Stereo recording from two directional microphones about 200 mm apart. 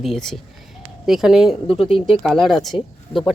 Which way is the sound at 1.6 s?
25° left (ahead or behind).